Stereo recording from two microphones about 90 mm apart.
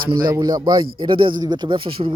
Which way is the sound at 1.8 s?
85° right.